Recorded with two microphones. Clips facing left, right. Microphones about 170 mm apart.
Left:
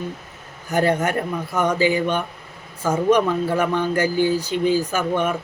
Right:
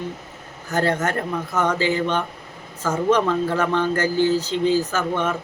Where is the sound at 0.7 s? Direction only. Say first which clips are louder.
Left 2 dB; 15° left (ahead or behind).